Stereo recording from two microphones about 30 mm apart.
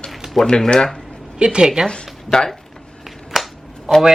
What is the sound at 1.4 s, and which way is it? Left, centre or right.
Speech, right.